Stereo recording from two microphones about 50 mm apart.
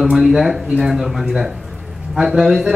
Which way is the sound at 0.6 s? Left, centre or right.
Centre.